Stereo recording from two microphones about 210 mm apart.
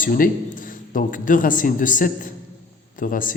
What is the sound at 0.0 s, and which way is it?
A man's voice, 40° left (ahead or behind).